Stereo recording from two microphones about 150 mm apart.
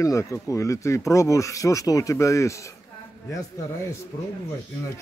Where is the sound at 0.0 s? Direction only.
20° left (ahead or behind).